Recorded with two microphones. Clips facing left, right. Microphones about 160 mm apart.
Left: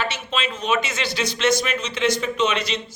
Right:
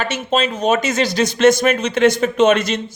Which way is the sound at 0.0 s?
45° right (ahead or behind).